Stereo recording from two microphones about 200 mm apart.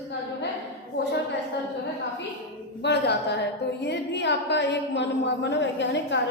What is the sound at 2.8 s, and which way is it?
A woman's voice, 60° left (ahead or behind).